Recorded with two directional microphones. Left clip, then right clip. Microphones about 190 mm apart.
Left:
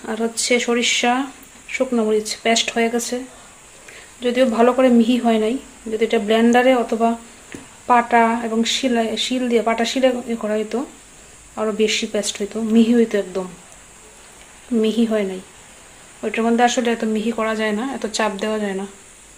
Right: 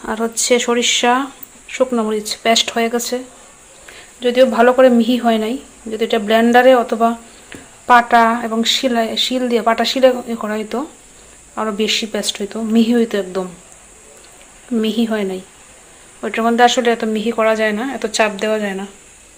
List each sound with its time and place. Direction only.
0.0 s speech: 15° right (ahead or behind)
4.2 s speech: 15° right (ahead or behind)
14.8 s speech: 15° right (ahead or behind)